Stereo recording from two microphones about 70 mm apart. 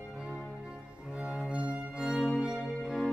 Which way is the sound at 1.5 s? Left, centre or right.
Right.